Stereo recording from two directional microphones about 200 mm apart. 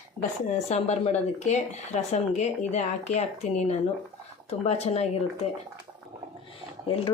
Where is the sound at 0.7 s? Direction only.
35° left (ahead or behind).